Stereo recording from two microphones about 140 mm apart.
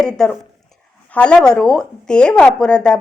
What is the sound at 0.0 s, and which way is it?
Speech, 5° left (ahead or behind).